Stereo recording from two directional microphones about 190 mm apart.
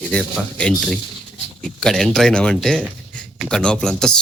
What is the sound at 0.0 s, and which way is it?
A man's voice, 5° left (ahead or behind).